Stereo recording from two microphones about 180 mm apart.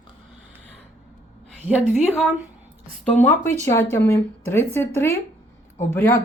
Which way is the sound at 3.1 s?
10° left (ahead or behind).